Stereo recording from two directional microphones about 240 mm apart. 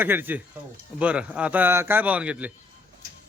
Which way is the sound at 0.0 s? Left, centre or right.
Centre.